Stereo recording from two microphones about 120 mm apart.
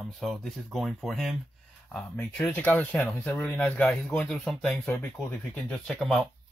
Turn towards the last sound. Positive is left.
turn(degrees=0)  # may be behind; listen again after turning